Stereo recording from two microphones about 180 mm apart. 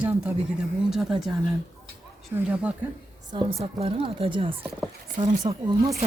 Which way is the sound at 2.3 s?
15° right (ahead or behind).